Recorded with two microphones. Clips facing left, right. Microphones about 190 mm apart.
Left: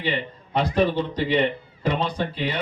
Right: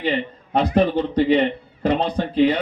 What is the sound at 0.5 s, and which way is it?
Speech, 55° right (ahead or behind).